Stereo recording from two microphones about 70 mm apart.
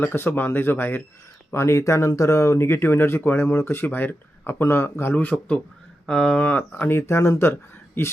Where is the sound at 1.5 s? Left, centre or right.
Left.